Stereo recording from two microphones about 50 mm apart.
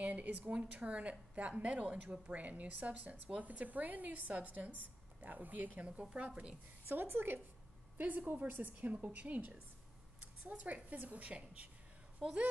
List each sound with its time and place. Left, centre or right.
0.0 s a woman's voice: right
6.9 s a woman's voice: right
8.0 s a woman's voice: right
12.2 s a woman's voice: centre